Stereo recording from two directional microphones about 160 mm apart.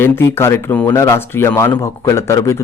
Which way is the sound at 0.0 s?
15° left (ahead or behind).